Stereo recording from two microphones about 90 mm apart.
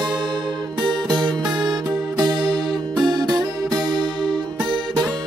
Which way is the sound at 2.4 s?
Centre (ahead or behind).